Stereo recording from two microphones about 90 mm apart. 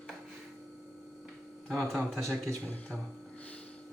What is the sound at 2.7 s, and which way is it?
Speech, 15° left (ahead or behind).